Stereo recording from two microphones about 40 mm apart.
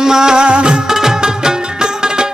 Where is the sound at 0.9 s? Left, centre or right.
Centre.